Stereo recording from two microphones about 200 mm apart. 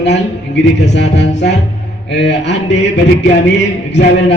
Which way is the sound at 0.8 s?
60° left (ahead or behind).